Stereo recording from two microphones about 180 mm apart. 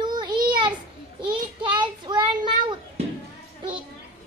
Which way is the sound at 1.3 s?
25° right (ahead or behind).